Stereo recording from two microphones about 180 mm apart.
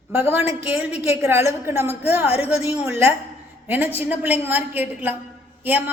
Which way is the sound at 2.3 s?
35° left (ahead or behind).